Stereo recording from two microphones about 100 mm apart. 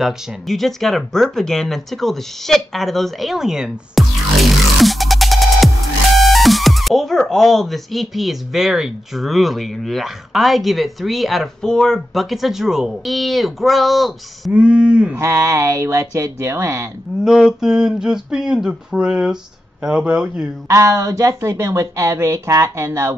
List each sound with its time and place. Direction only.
0.0 s speech: centre (ahead or behind)
14.5 s speech: 10° right (ahead or behind)
15.1 s speech: 30° right (ahead or behind)
17.2 s speech: 5° right (ahead or behind)
20.6 s speech: 30° right (ahead or behind)